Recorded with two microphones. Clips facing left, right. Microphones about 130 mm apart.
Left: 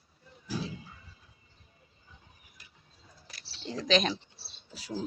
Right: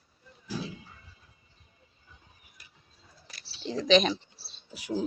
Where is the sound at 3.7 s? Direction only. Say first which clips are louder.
Right 5 dB; centre (ahead or behind).